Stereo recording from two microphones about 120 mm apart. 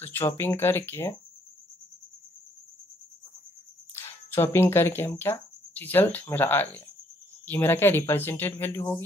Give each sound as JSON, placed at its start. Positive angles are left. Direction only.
{"t": 0.0, "sound": "speech", "side_deg": 20}
{"t": 3.9, "sound": "speech", "side_deg": 20}